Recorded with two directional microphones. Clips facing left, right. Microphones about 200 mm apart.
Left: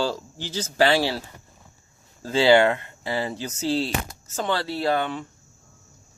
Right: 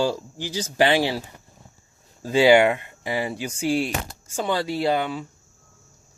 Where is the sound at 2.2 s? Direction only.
15° right (ahead or behind).